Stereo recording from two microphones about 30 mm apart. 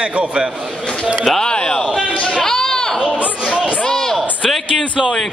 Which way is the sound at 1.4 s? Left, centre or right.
Left.